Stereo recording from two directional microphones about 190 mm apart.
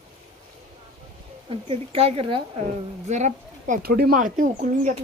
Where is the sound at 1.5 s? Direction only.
30° right (ahead or behind).